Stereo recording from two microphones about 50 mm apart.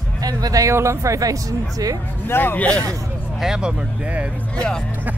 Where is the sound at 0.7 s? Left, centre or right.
Right.